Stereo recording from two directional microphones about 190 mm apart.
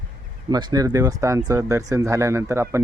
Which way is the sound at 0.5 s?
20° right (ahead or behind).